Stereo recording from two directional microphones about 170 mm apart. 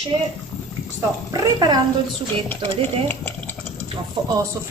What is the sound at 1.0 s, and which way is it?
Speech, 20° right (ahead or behind).